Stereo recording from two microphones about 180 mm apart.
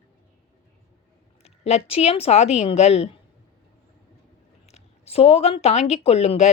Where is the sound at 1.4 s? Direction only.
35° left (ahead or behind).